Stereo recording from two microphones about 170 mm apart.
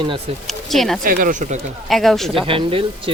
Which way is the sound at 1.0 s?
55° right (ahead or behind).